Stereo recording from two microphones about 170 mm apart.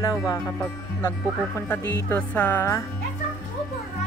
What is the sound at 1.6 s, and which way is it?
Speech, 15° left (ahead or behind).